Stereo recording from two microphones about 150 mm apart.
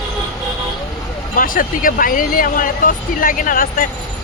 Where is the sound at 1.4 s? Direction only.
65° left (ahead or behind).